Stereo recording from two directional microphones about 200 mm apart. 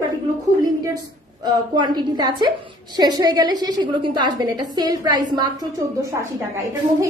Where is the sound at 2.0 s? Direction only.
20° right (ahead or behind).